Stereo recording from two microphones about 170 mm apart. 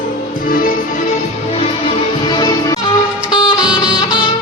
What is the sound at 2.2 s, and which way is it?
Music, 25° left (ahead or behind).